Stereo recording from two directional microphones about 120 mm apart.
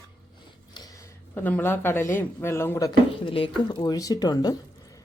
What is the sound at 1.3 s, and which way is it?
Speech, 15° left (ahead or behind).